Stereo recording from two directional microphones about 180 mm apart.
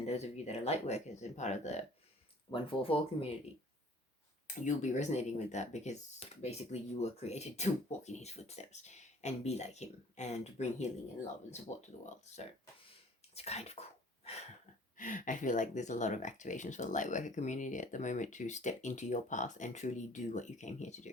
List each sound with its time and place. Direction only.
0.0 s speech: 35° left (ahead or behind)
4.4 s speech: 45° left (ahead or behind)
14.9 s speech: 45° left (ahead or behind)